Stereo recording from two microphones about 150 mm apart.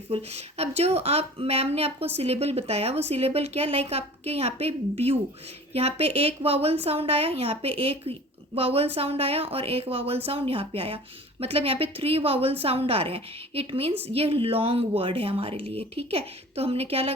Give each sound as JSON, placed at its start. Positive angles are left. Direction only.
{"t": 0.1, "sound": "a woman's voice", "side_deg": -45}